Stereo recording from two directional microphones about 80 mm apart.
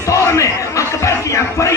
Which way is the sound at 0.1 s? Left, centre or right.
Left.